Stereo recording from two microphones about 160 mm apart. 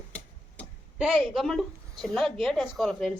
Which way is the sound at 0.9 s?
Centre (ahead or behind).